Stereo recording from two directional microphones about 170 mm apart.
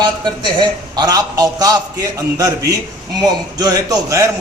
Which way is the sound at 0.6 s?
25° right (ahead or behind).